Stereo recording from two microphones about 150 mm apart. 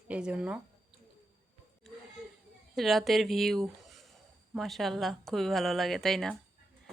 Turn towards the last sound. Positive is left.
turn(degrees=0)  # may be behind; listen again after turning